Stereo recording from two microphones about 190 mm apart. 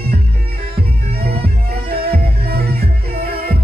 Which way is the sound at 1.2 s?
55° right (ahead or behind).